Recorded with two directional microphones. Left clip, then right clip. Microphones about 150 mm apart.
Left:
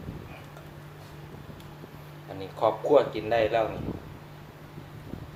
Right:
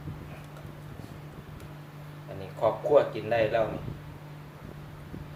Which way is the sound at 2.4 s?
35° left (ahead or behind).